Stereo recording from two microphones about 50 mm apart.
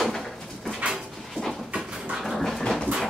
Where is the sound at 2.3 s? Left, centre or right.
Centre.